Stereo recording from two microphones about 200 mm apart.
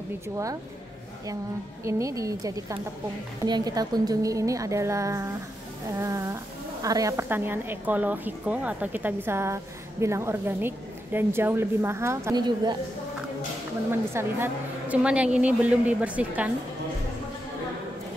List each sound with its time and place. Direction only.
1.9 s a woman's voice: 15° right (ahead or behind)
14.1 s a woman's voice: 10° right (ahead or behind)